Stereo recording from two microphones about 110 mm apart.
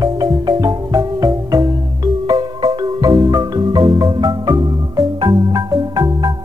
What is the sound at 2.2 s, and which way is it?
Marimba, 40° right (ahead or behind).